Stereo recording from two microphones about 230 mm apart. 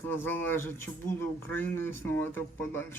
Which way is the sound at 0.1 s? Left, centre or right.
Centre.